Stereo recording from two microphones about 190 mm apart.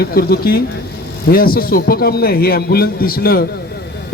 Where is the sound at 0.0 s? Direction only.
55° left (ahead or behind).